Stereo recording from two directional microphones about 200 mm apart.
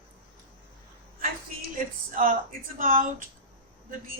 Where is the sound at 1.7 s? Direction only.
45° right (ahead or behind).